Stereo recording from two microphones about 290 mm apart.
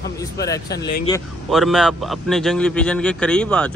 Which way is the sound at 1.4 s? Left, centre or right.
Centre.